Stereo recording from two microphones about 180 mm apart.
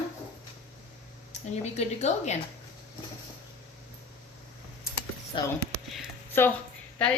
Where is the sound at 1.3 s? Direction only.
40° left (ahead or behind).